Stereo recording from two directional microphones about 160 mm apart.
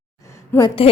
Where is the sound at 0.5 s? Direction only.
30° left (ahead or behind).